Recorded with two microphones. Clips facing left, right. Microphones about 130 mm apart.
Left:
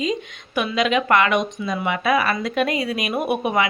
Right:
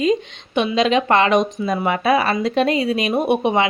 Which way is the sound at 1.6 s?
45° right (ahead or behind).